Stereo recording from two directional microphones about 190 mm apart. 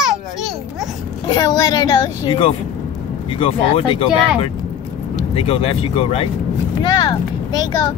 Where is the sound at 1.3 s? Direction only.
20° left (ahead or behind).